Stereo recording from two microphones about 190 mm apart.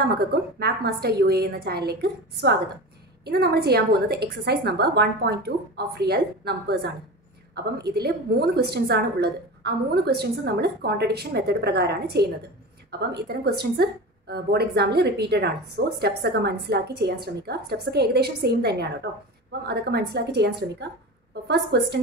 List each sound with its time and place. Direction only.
0.0 s a woman's voice: 55° right (ahead or behind)